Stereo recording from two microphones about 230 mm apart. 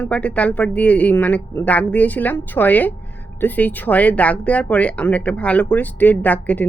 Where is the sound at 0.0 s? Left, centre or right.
Centre.